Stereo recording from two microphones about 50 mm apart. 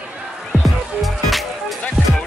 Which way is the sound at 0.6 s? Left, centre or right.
Centre.